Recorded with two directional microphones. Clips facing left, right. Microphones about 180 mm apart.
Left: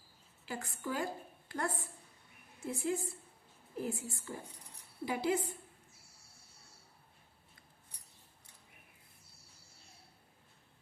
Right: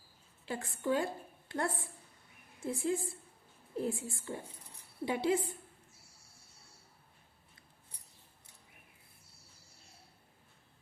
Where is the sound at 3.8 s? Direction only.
25° right (ahead or behind).